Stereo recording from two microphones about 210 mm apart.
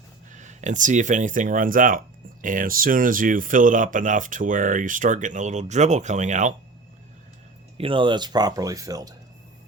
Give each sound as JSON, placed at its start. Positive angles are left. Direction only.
{"t": 0.3, "sound": "speech", "side_deg": -35}
{"t": 7.8, "sound": "speech", "side_deg": -25}